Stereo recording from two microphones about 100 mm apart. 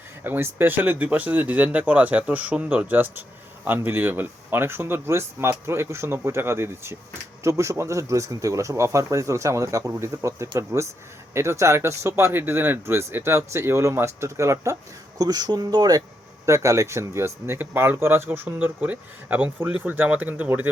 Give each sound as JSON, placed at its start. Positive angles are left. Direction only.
{"t": 0.3, "sound": "speech", "side_deg": -25}
{"t": 15.2, "sound": "speech", "side_deg": -40}